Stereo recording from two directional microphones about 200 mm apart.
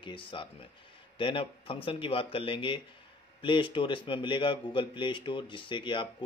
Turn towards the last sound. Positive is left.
turn(degrees=25)  # may be behind; listen again after turning